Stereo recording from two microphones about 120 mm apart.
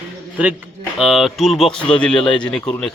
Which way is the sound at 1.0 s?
Centre (ahead or behind).